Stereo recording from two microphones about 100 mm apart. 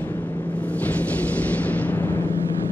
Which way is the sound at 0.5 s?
15° left (ahead or behind).